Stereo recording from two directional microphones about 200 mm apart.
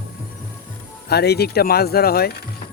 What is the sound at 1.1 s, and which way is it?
Speech, 55° left (ahead or behind).